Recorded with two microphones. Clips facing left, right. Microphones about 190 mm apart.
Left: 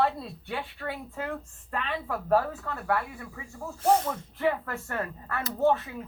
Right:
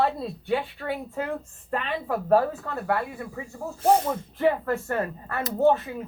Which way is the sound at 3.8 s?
10° right (ahead or behind).